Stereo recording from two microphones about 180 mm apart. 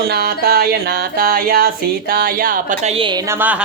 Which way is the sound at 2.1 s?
50° right (ahead or behind).